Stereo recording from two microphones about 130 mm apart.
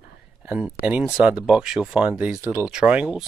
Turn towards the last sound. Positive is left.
turn(degrees=-5)  # may be behind; listen again after turning